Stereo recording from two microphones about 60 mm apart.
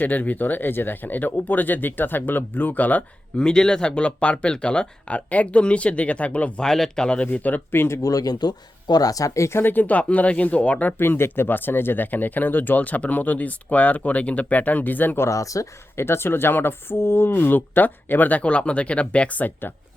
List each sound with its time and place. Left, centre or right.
0.0 s speech: left
3.3 s speech: centre
6.7 s speech: centre
7.3 s speech: left
8.0 s speech: left
9.7 s speech: left
10.9 s speech: left
15.2 s speech: left
16.0 s speech: left